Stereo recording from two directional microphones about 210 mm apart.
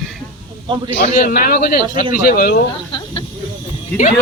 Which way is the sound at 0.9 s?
40° left (ahead or behind).